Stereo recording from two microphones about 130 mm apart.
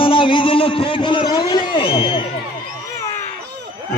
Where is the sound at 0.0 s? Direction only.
40° left (ahead or behind).